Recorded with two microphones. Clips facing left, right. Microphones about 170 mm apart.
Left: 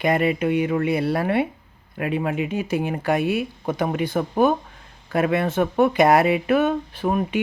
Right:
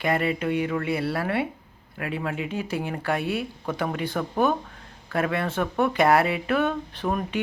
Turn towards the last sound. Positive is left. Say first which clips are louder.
# left 5 dB
turn(degrees=10)  # may be behind; listen again after turning